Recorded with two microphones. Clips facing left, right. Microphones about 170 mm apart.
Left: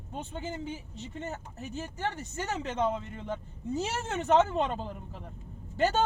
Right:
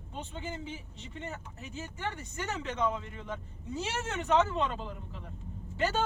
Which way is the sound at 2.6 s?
45° left (ahead or behind).